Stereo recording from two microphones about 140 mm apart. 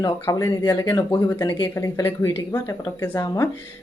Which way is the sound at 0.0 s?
25° left (ahead or behind).